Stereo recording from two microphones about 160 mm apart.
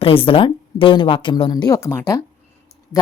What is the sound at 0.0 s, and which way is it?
Speech, 35° left (ahead or behind).